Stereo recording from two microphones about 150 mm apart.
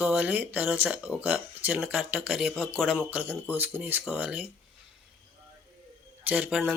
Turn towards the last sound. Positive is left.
turn(degrees=-10)  # may be behind; listen again after turning